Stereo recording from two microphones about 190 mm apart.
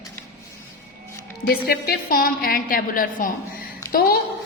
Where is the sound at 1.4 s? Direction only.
55° left (ahead or behind).